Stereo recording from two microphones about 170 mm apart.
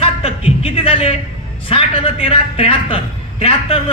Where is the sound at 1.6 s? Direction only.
35° left (ahead or behind).